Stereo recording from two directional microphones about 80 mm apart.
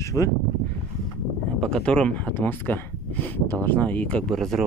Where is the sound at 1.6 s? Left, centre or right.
Centre.